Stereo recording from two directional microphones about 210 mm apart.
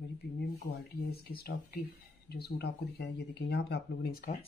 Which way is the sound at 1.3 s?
45° left (ahead or behind).